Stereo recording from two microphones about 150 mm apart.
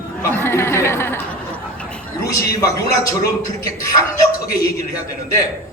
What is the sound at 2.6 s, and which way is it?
Speech, 25° left (ahead or behind).